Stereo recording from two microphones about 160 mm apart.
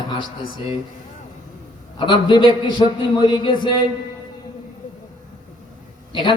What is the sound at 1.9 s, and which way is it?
A man's voice, 30° left (ahead or behind).